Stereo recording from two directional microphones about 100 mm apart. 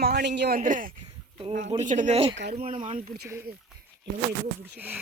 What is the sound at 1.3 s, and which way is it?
Speech, 85° right.